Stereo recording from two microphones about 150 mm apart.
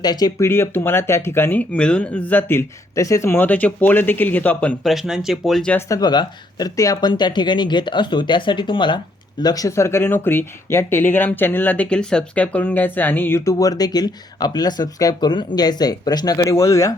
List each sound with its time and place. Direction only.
0.0 s speech: 25° left (ahead or behind); by 5.7 s centre (ahead or behind)
5.7 s speech: 25° left (ahead or behind)